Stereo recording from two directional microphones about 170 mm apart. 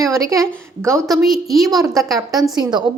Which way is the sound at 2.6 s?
25° right (ahead or behind).